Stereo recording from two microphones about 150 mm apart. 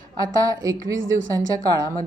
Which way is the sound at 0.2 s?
25° right (ahead or behind).